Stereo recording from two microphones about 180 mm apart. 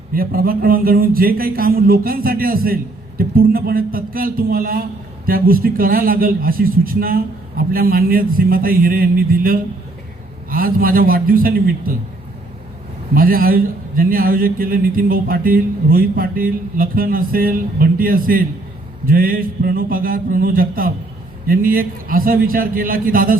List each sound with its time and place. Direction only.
0.1 s a man's voice: 55° right (ahead or behind)
13.1 s a man's voice: 55° right (ahead or behind)